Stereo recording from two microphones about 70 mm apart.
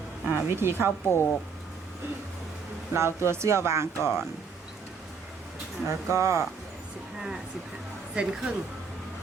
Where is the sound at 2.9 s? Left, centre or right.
Right.